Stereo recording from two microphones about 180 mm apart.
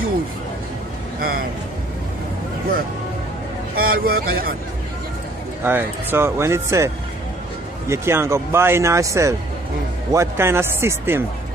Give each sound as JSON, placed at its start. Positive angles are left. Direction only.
{"t": 3.7, "sound": "speech", "side_deg": -55}
{"t": 5.6, "sound": "speech", "side_deg": -10}
{"t": 7.9, "sound": "speech", "side_deg": -15}